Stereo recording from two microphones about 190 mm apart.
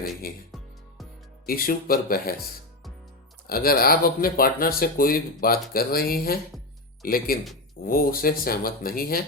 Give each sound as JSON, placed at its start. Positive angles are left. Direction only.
{"t": 1.5, "sound": "speech", "side_deg": 50}
{"t": 3.4, "sound": "speech", "side_deg": 50}